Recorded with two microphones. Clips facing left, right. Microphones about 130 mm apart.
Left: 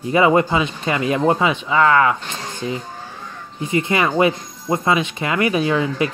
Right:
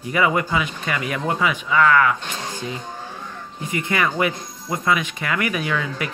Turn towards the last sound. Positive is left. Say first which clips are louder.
# left 6 dB
turn(degrees=25)  # may be behind; listen again after turning